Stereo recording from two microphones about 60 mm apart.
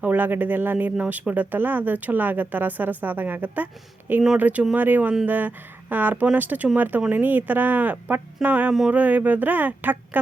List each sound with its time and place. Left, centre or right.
0.0 s speech: right
1.0 s speech: right